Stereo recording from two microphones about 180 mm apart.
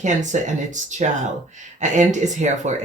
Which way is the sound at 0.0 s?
40° right (ahead or behind).